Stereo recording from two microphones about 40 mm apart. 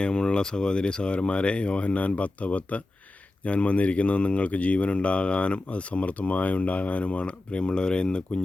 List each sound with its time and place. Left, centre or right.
0.0 s speech: left